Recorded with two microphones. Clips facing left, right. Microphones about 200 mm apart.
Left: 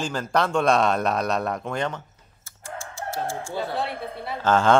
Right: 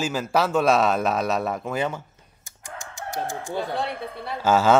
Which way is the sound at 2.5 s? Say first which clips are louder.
Left 3 dB; 15° right (ahead or behind).